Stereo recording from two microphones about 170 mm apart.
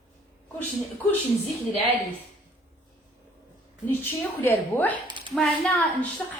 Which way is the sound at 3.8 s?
10° left (ahead or behind).